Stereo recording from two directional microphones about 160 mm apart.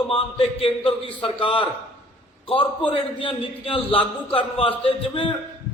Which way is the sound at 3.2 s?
35° left (ahead or behind).